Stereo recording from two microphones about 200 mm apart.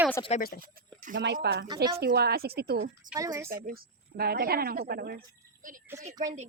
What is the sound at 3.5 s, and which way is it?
A woman's voice, 45° right (ahead or behind).